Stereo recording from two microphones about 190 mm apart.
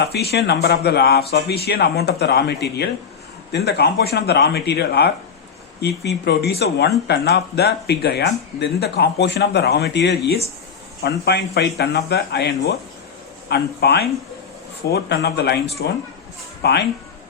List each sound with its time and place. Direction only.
0.0 s speech: 60° left (ahead or behind)